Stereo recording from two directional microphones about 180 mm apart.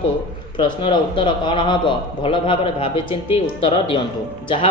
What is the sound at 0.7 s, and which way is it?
A man's voice, 25° left (ahead or behind).